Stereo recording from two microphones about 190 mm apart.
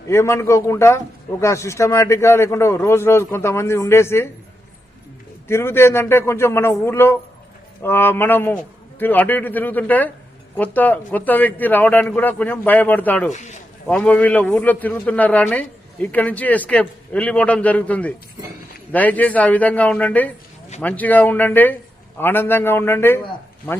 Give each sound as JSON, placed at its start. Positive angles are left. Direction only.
{"t": 0.1, "sound": "a man's voice", "side_deg": 15}
{"t": 5.5, "sound": "a man's voice", "side_deg": 15}
{"t": 13.3, "sound": "speech", "side_deg": 40}
{"t": 13.8, "sound": "a man's voice", "side_deg": 5}